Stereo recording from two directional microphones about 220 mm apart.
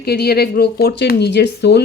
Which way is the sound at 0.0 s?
45° left (ahead or behind).